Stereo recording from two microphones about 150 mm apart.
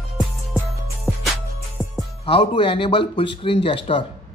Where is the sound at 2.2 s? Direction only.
35° left (ahead or behind).